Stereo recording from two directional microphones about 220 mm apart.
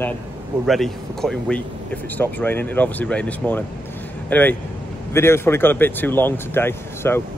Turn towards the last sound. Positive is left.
turn(degrees=10)  # may be behind; listen again after turning